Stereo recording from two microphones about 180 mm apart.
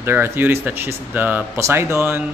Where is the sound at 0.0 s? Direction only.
10° right (ahead or behind).